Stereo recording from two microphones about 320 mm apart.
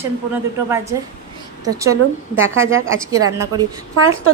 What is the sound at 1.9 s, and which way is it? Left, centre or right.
Speech, right.